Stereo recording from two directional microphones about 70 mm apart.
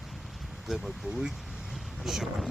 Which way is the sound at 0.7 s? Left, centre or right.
Centre.